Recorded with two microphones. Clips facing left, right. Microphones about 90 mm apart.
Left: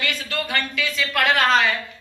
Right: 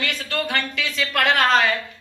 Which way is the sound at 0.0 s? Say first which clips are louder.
Right 1 dB; 55° right (ahead or behind).